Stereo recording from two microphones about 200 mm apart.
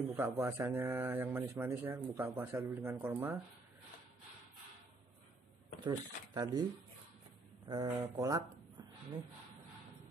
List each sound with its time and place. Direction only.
0.1 s speech: 15° right (ahead or behind)
5.9 s speech: 20° right (ahead or behind)
7.6 s speech: 25° right (ahead or behind)